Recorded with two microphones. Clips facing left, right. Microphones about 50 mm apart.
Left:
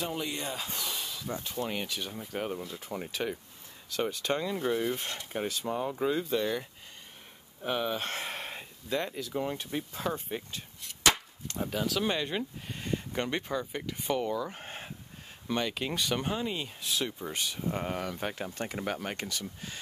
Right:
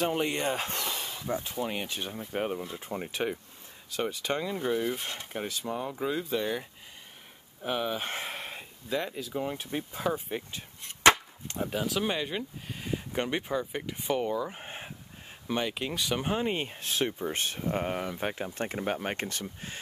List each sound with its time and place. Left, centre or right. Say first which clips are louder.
0.0 s speech: right 6 dB; right
1.2 s speech: right 3 dB; centre
1.9 s speech: right 1 dB; right
3.9 s speech: even; centre
10.5 s chop: right 1 dB; right
11.6 s speech: right 1 dB; centre
16.3 s speech: right 3 dB; right
17.6 s speech: right 3 dB; right
18.5 s speech: right 3 dB; right